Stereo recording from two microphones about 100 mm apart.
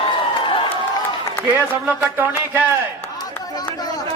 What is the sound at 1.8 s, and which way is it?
Speech, 20° right (ahead or behind).